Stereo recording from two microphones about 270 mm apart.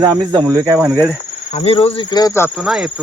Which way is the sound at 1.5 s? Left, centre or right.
Left.